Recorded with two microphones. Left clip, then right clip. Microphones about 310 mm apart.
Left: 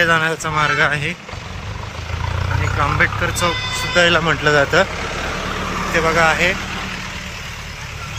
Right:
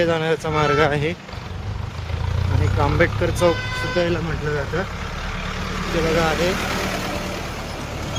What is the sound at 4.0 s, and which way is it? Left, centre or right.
Speech, left.